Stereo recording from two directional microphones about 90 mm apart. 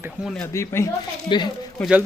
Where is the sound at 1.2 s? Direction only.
60° left (ahead or behind).